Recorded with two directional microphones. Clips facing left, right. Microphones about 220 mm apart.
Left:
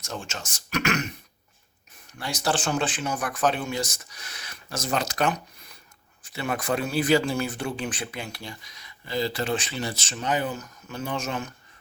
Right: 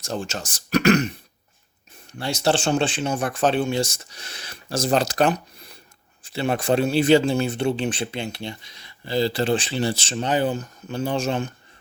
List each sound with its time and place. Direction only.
0.0 s speech: 35° right (ahead or behind)
2.1 s speech: 25° right (ahead or behind)